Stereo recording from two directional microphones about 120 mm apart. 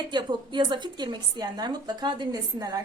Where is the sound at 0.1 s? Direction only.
40° right (ahead or behind).